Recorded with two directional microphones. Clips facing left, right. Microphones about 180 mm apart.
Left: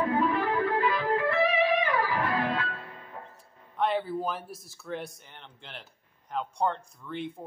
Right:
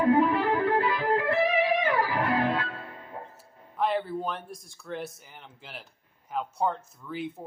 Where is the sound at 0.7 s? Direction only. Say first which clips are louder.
Right 1 dB; 20° right (ahead or behind).